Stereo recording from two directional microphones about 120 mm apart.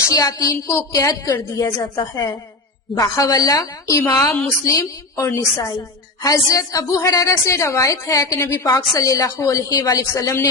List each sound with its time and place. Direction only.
0.1 s a woman's voice: 30° left (ahead or behind)